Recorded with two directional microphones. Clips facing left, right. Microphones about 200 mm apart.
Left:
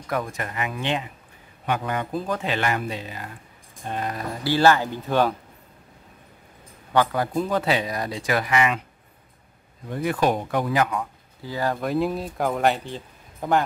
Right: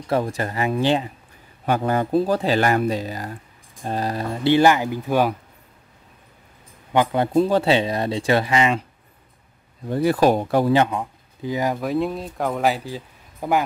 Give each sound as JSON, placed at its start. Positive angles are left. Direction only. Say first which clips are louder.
{"t": 0.0, "sound": "speech", "louder": "right 6 dB", "side_deg": -30}
{"t": 6.9, "sound": "speech", "louder": "right 3 dB", "side_deg": -20}
{"t": 9.8, "sound": "speech", "louder": "right 5 dB", "side_deg": -35}
{"t": 11.8, "sound": "speech", "louder": "right 1 dB", "side_deg": 0}